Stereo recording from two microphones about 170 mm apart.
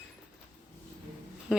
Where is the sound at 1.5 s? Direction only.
5° right (ahead or behind).